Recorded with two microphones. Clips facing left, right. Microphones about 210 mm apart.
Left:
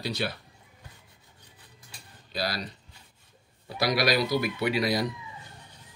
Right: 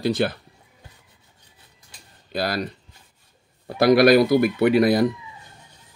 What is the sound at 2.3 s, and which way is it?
Speech, 50° right (ahead or behind).